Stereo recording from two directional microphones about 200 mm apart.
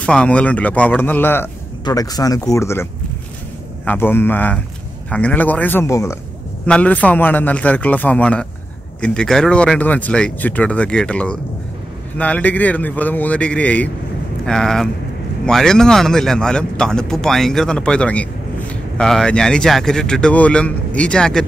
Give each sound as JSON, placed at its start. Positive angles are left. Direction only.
{"t": 0.0, "sound": "a man's voice", "side_deg": 5}